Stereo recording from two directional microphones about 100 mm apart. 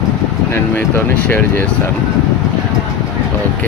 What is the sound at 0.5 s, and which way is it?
Speech, 20° left (ahead or behind).